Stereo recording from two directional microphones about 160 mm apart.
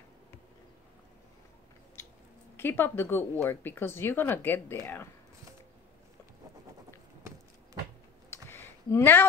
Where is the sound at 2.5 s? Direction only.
10° left (ahead or behind).